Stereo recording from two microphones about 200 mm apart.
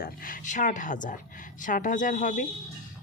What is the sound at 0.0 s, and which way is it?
A woman's voice, 45° left (ahead or behind).